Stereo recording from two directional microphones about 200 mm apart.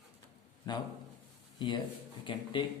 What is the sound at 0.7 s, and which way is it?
Speech, 20° left (ahead or behind).